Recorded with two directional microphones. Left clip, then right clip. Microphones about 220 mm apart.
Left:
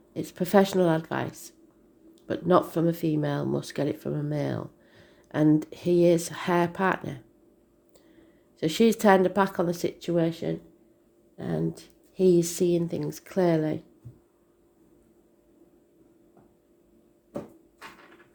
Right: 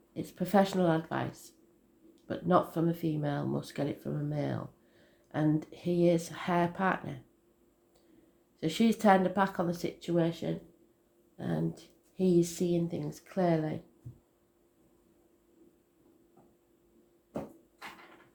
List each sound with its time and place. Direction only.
0.1 s speech: 40° left (ahead or behind)
8.6 s speech: 40° left (ahead or behind)